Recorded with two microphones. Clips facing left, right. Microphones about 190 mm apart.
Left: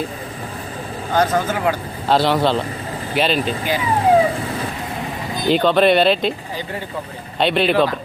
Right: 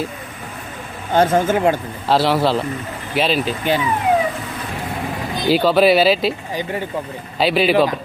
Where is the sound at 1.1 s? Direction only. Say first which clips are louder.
Right 3 dB; 25° right (ahead or behind).